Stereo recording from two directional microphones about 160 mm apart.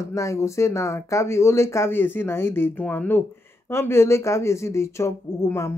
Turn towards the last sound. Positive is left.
turn(degrees=20)  # may be behind; listen again after turning